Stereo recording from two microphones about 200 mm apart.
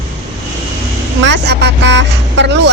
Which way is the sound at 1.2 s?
60° right (ahead or behind).